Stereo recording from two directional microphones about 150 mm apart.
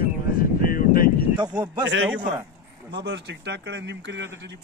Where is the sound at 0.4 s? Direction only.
70° left (ahead or behind).